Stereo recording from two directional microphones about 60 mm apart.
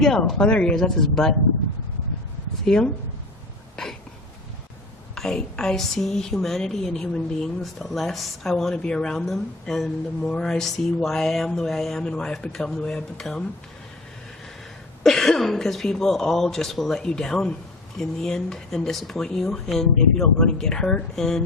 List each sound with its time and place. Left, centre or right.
0.0 s speech: centre
2.6 s speech: centre
5.1 s speech: centre
15.0 s speech: centre